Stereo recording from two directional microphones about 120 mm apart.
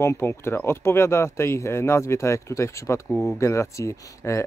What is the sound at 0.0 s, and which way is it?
Speech, 20° left (ahead or behind).